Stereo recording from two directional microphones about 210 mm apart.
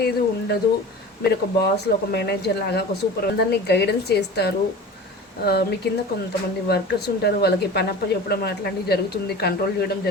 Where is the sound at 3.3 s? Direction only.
50° left (ahead or behind).